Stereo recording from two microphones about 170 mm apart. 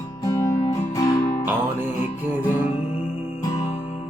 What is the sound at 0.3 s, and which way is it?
Music, 20° left (ahead or behind).